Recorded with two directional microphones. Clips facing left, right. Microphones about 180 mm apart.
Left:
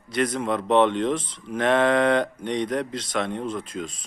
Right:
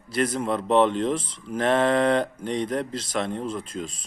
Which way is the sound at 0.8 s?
30° right (ahead or behind).